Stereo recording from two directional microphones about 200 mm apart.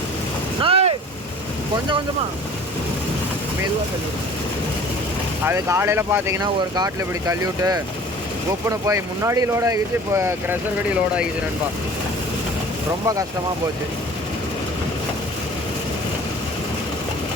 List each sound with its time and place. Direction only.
0.6 s vehicle: 30° right (ahead or behind)
5.5 s speech: 15° right (ahead or behind)